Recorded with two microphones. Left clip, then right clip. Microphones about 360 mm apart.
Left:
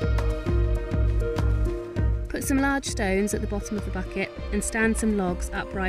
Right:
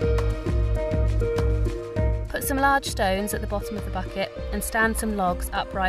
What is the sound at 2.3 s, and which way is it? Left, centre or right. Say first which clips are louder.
Speech: right 4 dB; right.